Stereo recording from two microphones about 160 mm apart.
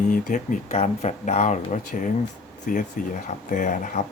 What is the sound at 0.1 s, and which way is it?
Speech, 55° left (ahead or behind).